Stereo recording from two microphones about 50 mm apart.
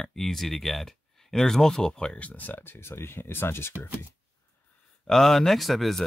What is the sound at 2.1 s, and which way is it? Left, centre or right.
Speech, left.